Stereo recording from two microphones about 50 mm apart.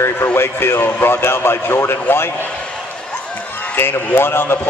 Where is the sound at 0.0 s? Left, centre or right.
Left.